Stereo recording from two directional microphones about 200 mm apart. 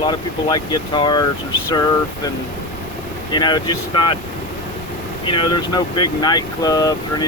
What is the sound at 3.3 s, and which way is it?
Speech, 20° left (ahead or behind).